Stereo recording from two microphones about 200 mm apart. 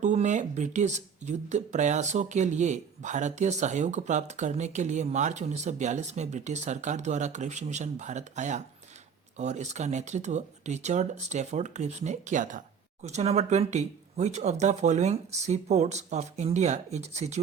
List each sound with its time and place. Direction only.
0.0 s speech: 35° right (ahead or behind)